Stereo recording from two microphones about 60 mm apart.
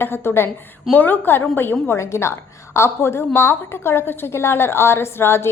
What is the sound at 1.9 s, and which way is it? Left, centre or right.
A woman's voice, left.